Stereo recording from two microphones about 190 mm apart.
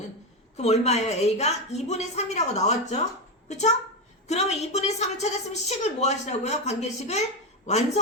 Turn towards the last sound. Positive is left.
turn(degrees=35)  # may be behind; listen again after turning